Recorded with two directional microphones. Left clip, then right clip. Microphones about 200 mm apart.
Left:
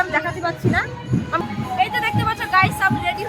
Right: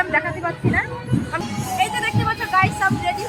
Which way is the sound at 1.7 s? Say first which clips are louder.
Left 1 dB; centre (ahead or behind).